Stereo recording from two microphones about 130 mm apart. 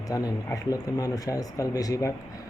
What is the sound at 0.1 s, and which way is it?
Speech, 25° left (ahead or behind).